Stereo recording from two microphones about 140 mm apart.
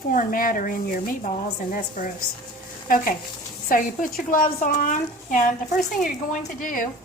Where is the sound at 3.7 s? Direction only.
80° left.